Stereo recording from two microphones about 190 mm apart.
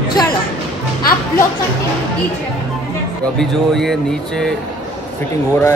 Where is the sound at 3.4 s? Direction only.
Centre (ahead or behind).